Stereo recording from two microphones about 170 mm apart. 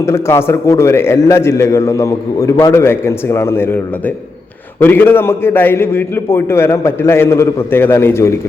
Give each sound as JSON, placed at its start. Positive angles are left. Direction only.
{"t": 0.0, "sound": "a man's voice", "side_deg": 15}
{"t": 4.8, "sound": "a man's voice", "side_deg": 10}